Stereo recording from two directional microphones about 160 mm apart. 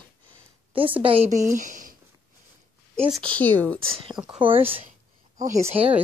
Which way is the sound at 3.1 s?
5° left (ahead or behind).